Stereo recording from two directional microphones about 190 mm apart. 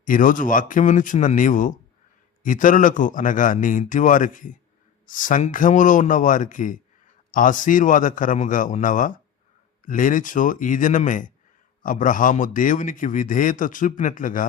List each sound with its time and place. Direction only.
0.0 s a man's voice: 45° left (ahead or behind)